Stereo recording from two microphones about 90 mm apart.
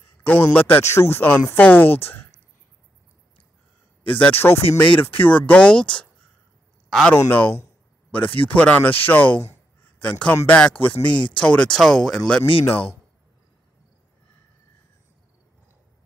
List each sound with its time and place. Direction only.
0.2 s speech: 20° left (ahead or behind)
4.2 s speech: 20° left (ahead or behind); by 7.2 s 5° left (ahead or behind)
7.2 s speech: 20° left (ahead or behind)
12.4 s speech: 90° left